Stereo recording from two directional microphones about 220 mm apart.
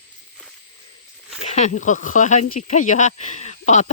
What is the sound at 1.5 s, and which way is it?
Speech, 30° left (ahead or behind).